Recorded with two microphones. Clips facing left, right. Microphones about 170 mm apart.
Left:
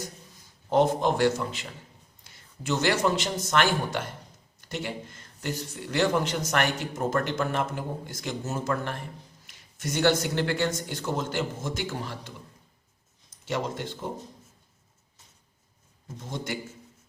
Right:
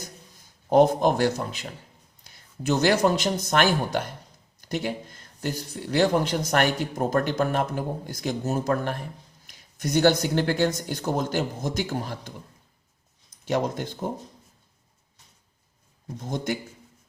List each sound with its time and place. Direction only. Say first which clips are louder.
0.7 s speech: right 4 dB; 40° right (ahead or behind)
13.5 s speech: right 5 dB; 45° right (ahead or behind)